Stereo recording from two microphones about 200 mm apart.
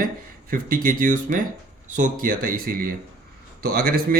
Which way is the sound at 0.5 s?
45° right (ahead or behind).